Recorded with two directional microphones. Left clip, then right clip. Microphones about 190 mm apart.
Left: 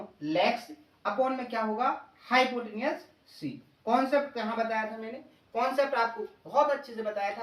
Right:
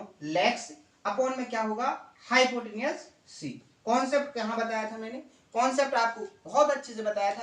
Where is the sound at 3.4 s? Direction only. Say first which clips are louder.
Left 1 dB; 5° right (ahead or behind).